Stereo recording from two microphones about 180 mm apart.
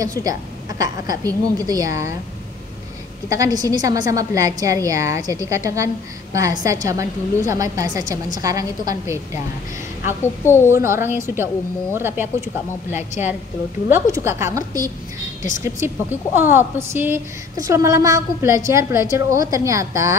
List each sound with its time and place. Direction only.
0.0 s a woman's voice: 20° right (ahead or behind)
3.3 s a woman's voice: 20° right (ahead or behind)
10.2 s a woman's voice: 15° left (ahead or behind)
10.7 s a woman's voice: 15° right (ahead or behind)
13.8 s a woman's voice: 15° right (ahead or behind)